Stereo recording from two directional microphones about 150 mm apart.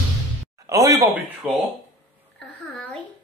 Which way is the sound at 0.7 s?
20° right (ahead or behind).